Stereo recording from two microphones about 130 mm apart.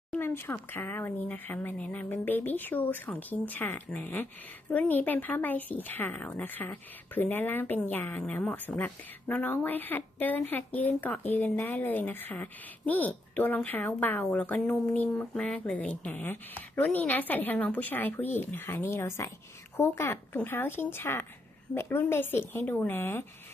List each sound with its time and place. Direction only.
0.1 s speech: 15° left (ahead or behind)